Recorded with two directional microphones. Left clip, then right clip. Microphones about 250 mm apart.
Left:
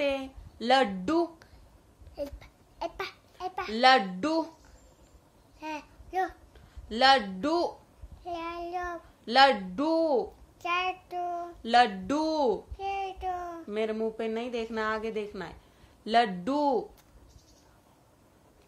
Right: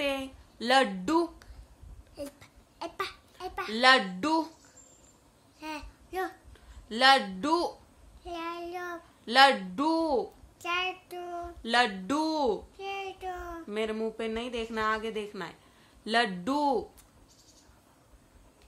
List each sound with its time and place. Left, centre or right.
0.0 s a sound: centre
2.1 s babbling: centre
5.6 s a child's voice: centre
8.2 s child singing: centre
16.0 s speech: centre